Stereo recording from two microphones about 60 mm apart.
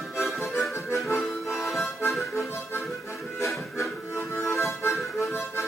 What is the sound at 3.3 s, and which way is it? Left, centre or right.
Music, left.